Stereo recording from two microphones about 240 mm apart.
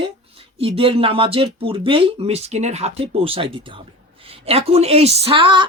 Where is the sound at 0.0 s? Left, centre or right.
Right.